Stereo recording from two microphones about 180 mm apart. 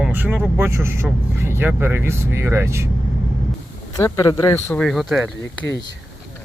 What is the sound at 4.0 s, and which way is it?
Speech, 20° left (ahead or behind).